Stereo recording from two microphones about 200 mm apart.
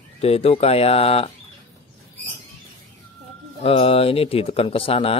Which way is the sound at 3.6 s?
30° left (ahead or behind).